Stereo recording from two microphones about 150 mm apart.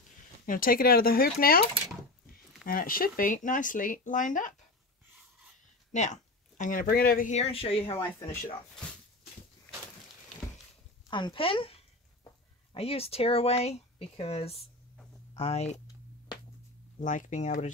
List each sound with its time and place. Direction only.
0.5 s speech: 70° left (ahead or behind)
2.6 s speech: 70° left (ahead or behind)
5.9 s a sound: 50° left (ahead or behind)
6.6 s speech: 70° left (ahead or behind); by 7.2 s 90° left
7.2 s speech: 45° left (ahead or behind)
11.1 s speech: 30° left (ahead or behind); by 15.8 s 45° left (ahead or behind)
17.0 s speech: 60° left (ahead or behind)